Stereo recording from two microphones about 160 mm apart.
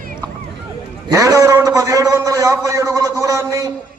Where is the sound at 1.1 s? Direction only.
20° right (ahead or behind).